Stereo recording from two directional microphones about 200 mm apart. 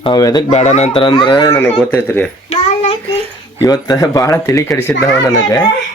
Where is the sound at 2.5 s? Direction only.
30° left (ahead or behind).